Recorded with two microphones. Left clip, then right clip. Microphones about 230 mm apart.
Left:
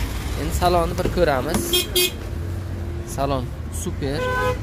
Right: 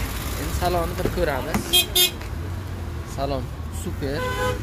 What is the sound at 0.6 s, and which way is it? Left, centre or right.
Speech, centre.